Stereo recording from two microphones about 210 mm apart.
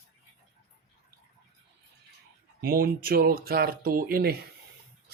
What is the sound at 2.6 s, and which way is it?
Speech, 45° right (ahead or behind).